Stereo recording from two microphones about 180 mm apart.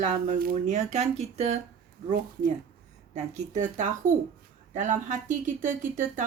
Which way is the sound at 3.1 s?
40° right (ahead or behind).